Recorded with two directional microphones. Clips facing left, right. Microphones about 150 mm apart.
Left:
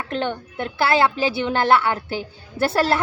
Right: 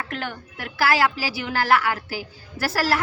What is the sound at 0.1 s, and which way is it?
A woman's voice, 25° left (ahead or behind).